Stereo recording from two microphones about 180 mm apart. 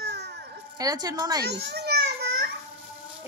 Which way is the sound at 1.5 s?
65° right (ahead or behind).